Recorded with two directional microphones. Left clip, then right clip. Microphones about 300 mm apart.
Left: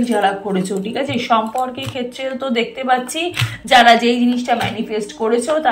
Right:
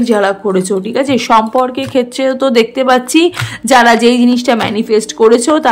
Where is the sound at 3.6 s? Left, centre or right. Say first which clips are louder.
Right 3 dB; centre.